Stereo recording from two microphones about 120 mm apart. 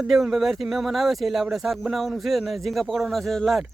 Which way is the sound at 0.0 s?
Centre (ahead or behind).